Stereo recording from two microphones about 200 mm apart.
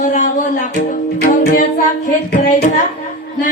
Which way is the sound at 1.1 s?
55° left (ahead or behind).